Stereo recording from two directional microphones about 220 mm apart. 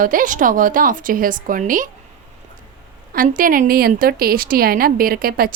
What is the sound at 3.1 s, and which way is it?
A woman's voice, 40° right (ahead or behind).